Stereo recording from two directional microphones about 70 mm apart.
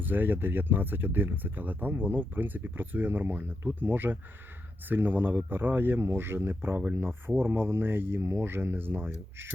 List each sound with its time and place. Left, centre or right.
0.0 s speech: right